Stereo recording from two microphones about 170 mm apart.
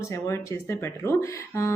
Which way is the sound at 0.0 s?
15° left (ahead or behind).